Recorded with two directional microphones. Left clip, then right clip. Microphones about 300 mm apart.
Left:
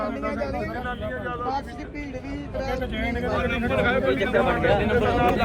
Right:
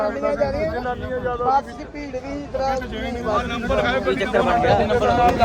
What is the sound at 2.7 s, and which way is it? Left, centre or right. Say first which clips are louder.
A man's voice: right 2 dB; right.